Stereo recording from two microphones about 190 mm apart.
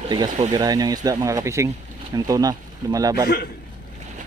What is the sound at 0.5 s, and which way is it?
Speech, 20° right (ahead or behind).